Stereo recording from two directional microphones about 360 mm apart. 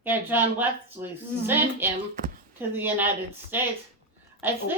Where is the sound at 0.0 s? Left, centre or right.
Centre.